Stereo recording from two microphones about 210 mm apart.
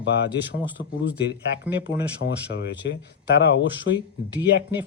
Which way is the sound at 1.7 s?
55° left (ahead or behind).